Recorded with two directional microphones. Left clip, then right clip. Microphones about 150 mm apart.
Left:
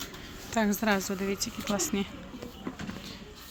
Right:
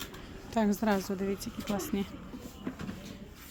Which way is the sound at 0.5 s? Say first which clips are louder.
Left 2 dB; 15° right (ahead or behind).